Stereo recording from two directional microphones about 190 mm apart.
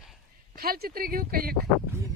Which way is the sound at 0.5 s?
50° right (ahead or behind).